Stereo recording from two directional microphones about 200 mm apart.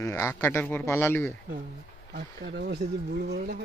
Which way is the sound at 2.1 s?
60° right (ahead or behind).